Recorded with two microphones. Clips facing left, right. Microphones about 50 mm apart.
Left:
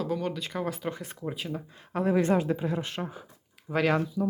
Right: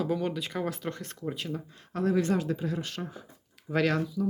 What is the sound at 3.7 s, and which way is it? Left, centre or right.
Speech, centre.